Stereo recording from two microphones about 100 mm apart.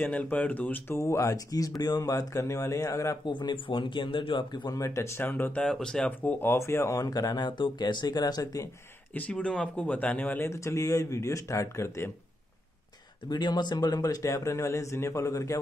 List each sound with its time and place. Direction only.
0.0 s speech: 15° left (ahead or behind)
3.3 s speech: 50° left (ahead or behind)
4.7 s speech: 30° left (ahead or behind)
5.7 s speech: 5° left (ahead or behind)
6.5 s speech: 25° left (ahead or behind)
9.1 s speech: 15° left (ahead or behind)
10.4 s speech: 30° left (ahead or behind)
13.3 s speech: 45° left (ahead or behind)